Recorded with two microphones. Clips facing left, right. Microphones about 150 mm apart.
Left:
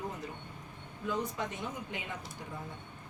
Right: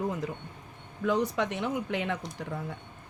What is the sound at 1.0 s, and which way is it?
Speech, 80° right.